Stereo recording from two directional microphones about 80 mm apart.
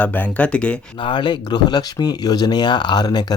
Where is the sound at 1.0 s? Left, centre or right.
Left.